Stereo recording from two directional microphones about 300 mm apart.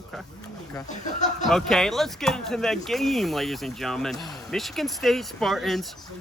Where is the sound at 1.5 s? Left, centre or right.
Centre.